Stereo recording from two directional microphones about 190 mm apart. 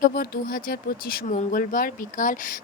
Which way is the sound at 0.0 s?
55° left (ahead or behind).